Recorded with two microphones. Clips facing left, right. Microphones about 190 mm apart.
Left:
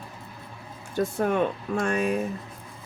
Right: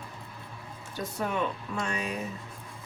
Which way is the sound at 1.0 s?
50° left (ahead or behind).